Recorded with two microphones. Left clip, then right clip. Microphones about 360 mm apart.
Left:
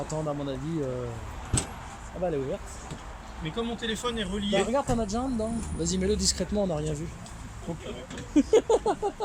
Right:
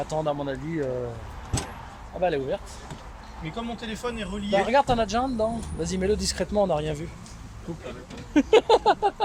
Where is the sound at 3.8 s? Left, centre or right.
Centre.